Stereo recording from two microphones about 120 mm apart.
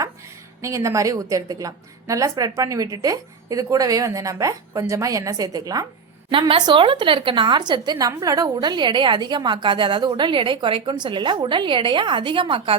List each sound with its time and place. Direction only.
0.6 s a woman's voice: 25° right (ahead or behind)
6.5 s a woman's voice: 45° right (ahead or behind)